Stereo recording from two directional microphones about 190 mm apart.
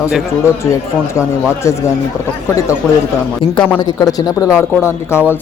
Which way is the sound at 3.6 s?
10° left (ahead or behind).